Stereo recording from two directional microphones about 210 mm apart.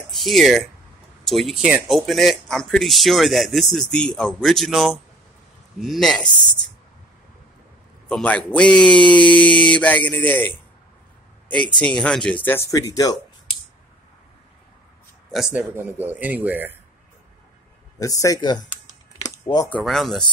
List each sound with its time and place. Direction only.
0.1 s speech: centre (ahead or behind)
8.1 s a woman's voice: 5° left (ahead or behind)
15.3 s speech: 5° right (ahead or behind)
17.9 s speech: 15° left (ahead or behind)
19.7 s speech: centre (ahead or behind)